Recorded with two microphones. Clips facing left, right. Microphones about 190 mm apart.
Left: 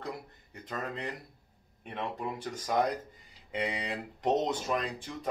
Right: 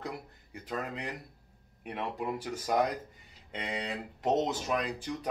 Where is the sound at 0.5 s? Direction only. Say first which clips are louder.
Right 1 dB; 5° right (ahead or behind).